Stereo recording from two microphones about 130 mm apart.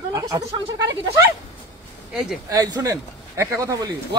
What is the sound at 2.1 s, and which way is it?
Speech, 5° right (ahead or behind).